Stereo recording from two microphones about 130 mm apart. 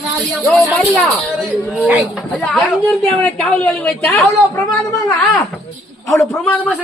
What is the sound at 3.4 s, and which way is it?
Speech, 5° left (ahead or behind).